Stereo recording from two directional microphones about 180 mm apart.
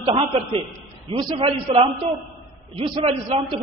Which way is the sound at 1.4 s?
30° right (ahead or behind).